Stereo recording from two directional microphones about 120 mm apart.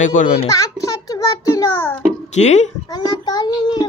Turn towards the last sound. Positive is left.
turn(degrees=35)  # may be behind; listen again after turning